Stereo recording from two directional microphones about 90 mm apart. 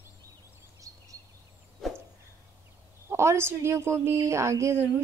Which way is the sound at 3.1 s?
30° right (ahead or behind).